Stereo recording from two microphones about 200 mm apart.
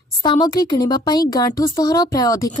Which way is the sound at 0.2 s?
20° left (ahead or behind).